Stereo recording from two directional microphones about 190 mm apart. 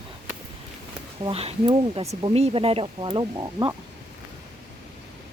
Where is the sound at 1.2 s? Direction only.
30° right (ahead or behind).